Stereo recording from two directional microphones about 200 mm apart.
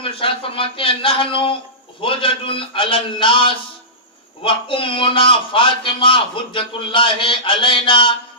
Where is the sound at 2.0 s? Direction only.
25° left (ahead or behind).